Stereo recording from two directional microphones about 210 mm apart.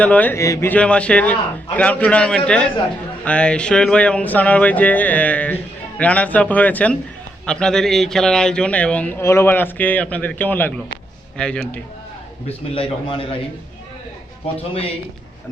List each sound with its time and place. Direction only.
0.0 s a man's voice: 5° left (ahead or behind)
13.1 s a man's voice: 25° left (ahead or behind)